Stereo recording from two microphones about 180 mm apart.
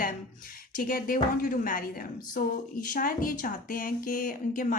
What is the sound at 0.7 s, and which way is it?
Speech, 50° left (ahead or behind).